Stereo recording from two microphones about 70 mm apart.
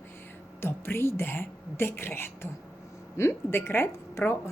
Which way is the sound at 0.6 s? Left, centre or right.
Left.